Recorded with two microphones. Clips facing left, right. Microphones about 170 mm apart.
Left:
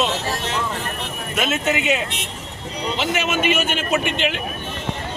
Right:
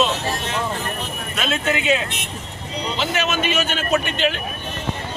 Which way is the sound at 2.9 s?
10° left (ahead or behind).